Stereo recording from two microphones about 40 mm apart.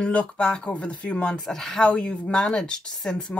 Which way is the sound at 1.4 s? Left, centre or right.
Centre.